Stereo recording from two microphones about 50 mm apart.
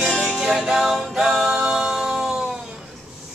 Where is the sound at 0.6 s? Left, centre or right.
Centre.